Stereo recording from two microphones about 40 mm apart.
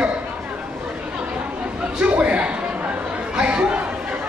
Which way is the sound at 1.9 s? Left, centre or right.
Right.